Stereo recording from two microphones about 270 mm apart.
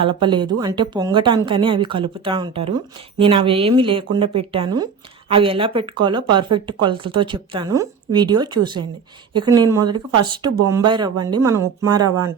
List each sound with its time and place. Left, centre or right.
0.0 s speech: centre